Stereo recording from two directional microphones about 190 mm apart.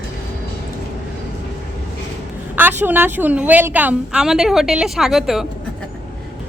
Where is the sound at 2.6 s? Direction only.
10° right (ahead or behind).